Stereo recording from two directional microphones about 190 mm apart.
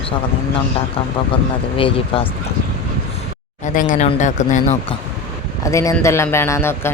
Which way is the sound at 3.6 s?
45° left (ahead or behind).